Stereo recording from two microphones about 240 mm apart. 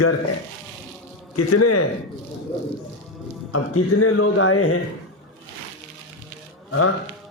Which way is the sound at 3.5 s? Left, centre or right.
Left.